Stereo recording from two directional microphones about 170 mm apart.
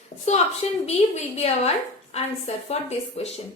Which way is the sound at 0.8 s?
40° left (ahead or behind).